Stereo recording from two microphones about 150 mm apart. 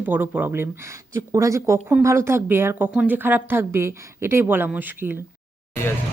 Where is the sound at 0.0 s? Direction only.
10° right (ahead or behind).